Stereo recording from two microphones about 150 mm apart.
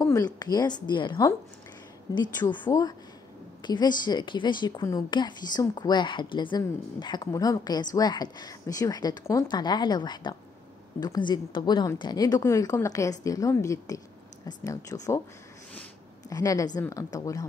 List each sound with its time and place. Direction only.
0.0 s a woman's voice: 20° left (ahead or behind)
2.3 s a woman's voice: 30° left (ahead or behind)
16.3 s a woman's voice: 25° left (ahead or behind)